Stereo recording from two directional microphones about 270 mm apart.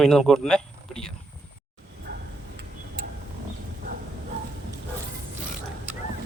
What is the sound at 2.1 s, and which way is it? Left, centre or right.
Tick-tock, right.